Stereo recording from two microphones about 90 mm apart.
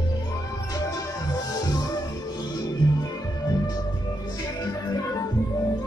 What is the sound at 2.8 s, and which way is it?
Music, 50° left (ahead or behind).